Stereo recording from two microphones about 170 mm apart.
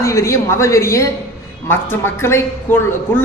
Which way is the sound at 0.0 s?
15° left (ahead or behind).